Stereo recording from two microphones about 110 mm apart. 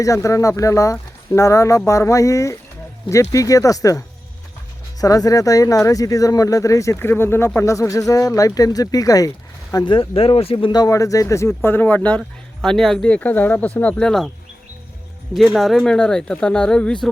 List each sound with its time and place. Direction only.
0.0 s speech: 30° left (ahead or behind)
9.7 s speech: 50° left (ahead or behind); by 14.3 s 5° left (ahead or behind)
15.3 s speech: centre (ahead or behind)